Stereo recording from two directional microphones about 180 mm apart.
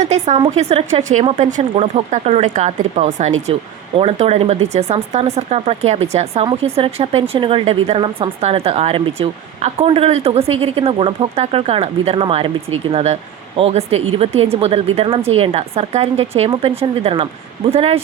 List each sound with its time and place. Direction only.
0.0 s a woman's voice: 40° right (ahead or behind)